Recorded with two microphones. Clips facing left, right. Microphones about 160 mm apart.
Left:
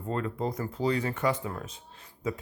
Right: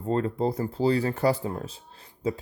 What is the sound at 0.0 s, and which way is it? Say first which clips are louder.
Speech: right 6 dB; 35° right (ahead or behind).